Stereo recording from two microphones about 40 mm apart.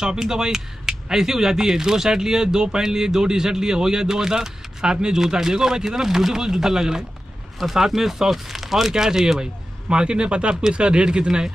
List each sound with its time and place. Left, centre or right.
0.0 s speech: centre